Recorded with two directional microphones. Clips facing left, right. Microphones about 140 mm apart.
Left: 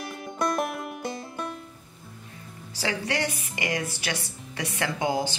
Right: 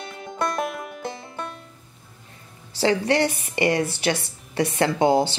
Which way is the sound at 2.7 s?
30° right (ahead or behind).